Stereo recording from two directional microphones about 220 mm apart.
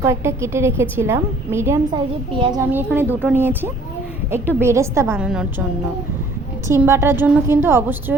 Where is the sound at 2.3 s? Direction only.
20° right (ahead or behind).